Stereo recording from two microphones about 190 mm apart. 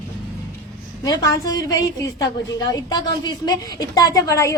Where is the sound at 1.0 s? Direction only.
20° left (ahead or behind).